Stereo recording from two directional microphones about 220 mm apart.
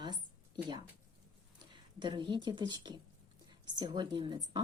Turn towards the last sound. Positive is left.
turn(degrees=-20)  # may be behind; listen again after turning